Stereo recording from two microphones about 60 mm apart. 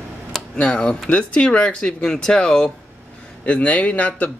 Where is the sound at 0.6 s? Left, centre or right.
Centre.